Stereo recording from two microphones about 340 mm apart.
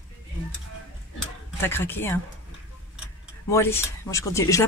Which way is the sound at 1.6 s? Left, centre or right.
Centre.